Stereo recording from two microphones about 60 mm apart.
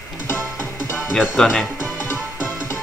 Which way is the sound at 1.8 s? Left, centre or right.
Left.